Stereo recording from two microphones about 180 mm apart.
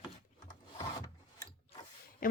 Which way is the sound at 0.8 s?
20° left (ahead or behind).